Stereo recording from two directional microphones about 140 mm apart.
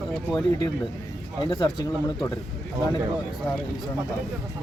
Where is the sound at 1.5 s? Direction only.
30° left (ahead or behind).